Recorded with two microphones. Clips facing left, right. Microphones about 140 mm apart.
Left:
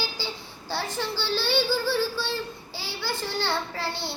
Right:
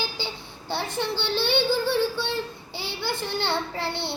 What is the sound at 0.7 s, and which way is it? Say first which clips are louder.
A child's voice: right 2 dB; 20° right (ahead or behind).